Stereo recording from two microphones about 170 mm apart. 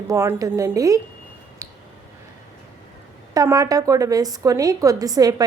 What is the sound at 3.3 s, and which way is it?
A woman's voice, 20° right (ahead or behind).